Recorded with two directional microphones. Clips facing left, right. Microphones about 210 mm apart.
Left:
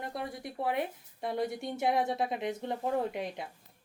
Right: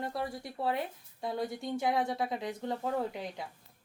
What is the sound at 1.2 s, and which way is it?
Speech, 20° left (ahead or behind).